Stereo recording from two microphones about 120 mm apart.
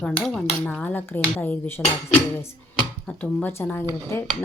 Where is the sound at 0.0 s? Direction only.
5° left (ahead or behind).